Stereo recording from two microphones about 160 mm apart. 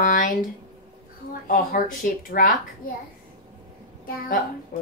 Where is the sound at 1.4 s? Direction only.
60° left (ahead or behind).